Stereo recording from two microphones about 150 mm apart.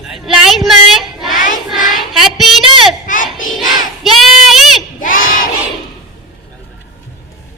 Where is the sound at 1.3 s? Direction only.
60° left (ahead or behind).